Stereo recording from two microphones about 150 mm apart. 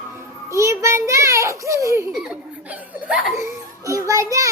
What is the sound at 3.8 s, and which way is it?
Speech, 20° right (ahead or behind).